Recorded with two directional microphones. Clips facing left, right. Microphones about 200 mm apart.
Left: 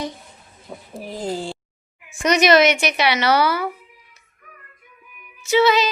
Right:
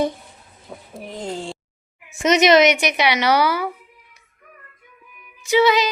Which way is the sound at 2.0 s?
20° right (ahead or behind).